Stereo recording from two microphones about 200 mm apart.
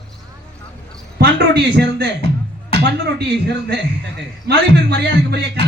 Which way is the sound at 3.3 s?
55° right (ahead or behind).